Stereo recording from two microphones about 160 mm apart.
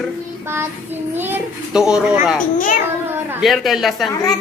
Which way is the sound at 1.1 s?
15° right (ahead or behind).